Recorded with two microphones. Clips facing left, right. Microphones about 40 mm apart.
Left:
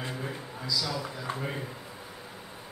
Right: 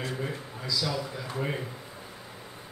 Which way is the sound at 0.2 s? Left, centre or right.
Centre.